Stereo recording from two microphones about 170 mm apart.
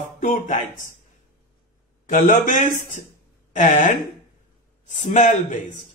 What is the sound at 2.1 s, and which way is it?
Speech, 50° left (ahead or behind).